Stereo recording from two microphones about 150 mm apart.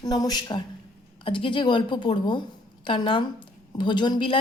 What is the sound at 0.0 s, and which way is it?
A woman's voice, 25° left (ahead or behind).